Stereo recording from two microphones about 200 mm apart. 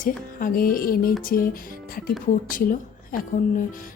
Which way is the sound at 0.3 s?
45° left (ahead or behind).